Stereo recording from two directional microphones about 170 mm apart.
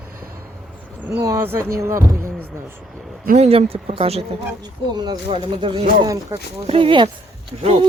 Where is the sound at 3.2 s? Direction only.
50° right (ahead or behind).